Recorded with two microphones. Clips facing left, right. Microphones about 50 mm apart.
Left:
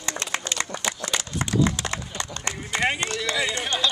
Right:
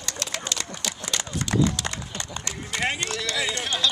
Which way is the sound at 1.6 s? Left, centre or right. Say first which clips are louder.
Left 1 dB; left.